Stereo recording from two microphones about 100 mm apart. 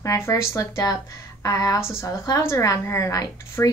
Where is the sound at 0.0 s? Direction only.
30° left (ahead or behind).